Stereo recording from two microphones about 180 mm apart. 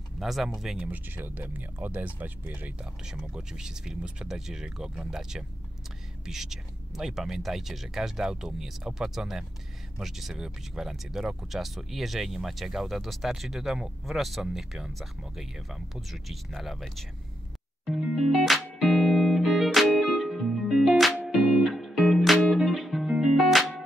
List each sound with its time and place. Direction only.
0.2 s speech: centre (ahead or behind)
17.8 s music: centre (ahead or behind)